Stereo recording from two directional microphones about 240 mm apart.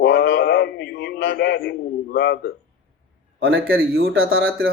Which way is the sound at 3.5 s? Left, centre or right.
Right.